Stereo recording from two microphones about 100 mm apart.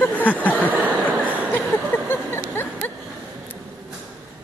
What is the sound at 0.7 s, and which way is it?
Chuckle, 15° right (ahead or behind).